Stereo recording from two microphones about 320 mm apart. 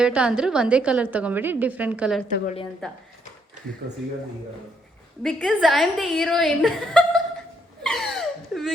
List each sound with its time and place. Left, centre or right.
0.0 s a woman's voice: centre
2.2 s a woman's voice: left
3.8 s speech: right
5.2 s a woman's voice: centre
7.9 s a sound: centre